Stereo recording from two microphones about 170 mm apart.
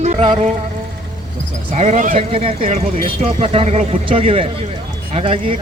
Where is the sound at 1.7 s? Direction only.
45° right (ahead or behind).